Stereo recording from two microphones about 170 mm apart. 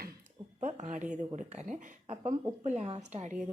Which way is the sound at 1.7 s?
45° right (ahead or behind).